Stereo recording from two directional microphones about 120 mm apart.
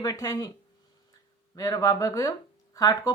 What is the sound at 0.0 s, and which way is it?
Speech, 30° left (ahead or behind).